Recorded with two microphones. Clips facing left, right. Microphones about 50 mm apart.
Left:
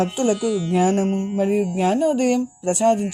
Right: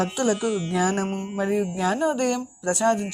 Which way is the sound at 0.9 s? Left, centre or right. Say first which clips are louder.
Left 6 dB; right.